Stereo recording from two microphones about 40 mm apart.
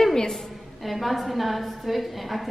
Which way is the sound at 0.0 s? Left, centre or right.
Centre.